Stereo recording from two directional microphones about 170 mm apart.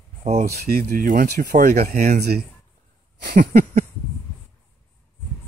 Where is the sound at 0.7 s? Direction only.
65° right (ahead or behind).